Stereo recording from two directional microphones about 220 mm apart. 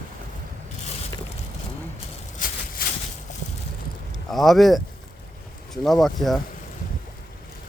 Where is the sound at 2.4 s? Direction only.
40° left (ahead or behind).